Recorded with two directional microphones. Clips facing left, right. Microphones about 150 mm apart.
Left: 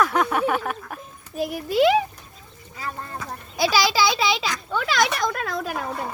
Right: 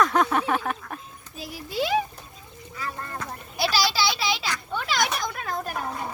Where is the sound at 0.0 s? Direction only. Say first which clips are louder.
Left 1 dB; 5° left (ahead or behind).